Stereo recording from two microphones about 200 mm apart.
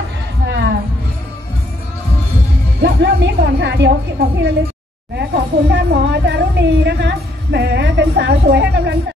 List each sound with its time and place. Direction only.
0.5 s music: 60° right (ahead or behind)
2.8 s a woman's voice: 60° right (ahead or behind)
5.7 s a woman's voice: 60° right (ahead or behind)